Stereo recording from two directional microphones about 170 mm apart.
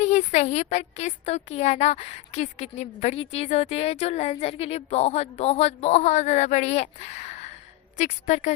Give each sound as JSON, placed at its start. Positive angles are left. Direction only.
{"t": 0.0, "sound": "a woman's voice", "side_deg": 45}